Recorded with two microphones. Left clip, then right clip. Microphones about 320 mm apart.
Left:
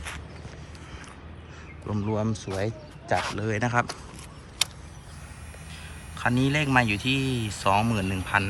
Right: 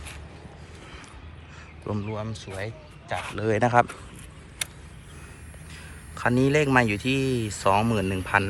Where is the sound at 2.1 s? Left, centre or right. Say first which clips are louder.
Left 5 dB; centre.